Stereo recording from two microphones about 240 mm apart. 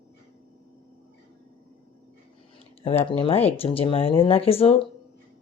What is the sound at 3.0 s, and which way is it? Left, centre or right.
Speech, left.